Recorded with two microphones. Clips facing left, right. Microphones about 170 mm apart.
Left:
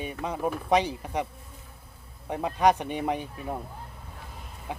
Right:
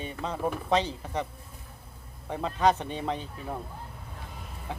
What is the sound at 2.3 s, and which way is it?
Speech, 15° left (ahead or behind).